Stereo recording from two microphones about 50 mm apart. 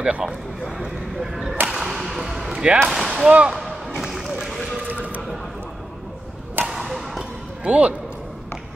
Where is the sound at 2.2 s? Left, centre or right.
Centre.